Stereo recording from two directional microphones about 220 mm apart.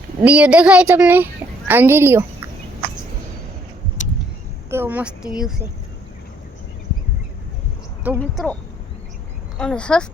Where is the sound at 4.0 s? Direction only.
35° left (ahead or behind).